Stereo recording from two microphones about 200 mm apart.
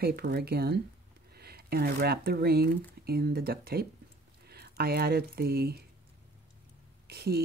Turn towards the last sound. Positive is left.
turn(degrees=-50)  # may be behind; listen again after turning